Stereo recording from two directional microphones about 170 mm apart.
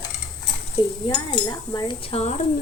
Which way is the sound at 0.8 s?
25° left (ahead or behind).